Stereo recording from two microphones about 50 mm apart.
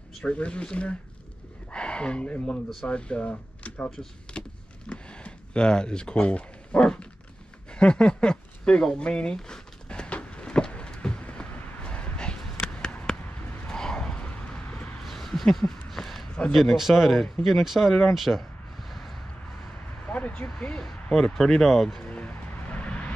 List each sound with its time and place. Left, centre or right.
0.2 s speech: left
3.9 s speech: centre
4.4 s a sound: left
15.0 s a sound: centre
16.5 s speech: centre
18.1 s a sound: centre
20.1 s vehicle: left
20.7 s speech: centre
22.0 s vehicle: left